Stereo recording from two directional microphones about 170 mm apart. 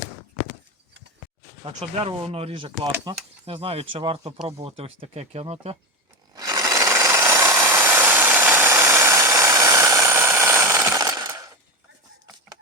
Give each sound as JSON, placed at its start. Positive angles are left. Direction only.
{"t": 1.6, "sound": "speech", "side_deg": -35}
{"t": 2.9, "sound": "speech", "side_deg": -20}
{"t": 3.4, "sound": "speech", "side_deg": -35}
{"t": 6.3, "sound": "rub", "side_deg": -20}